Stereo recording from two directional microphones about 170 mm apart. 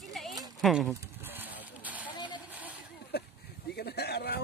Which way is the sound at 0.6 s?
Centre (ahead or behind).